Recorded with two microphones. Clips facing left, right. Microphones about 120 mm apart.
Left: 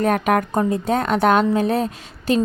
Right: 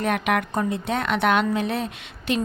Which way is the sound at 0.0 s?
40° left (ahead or behind).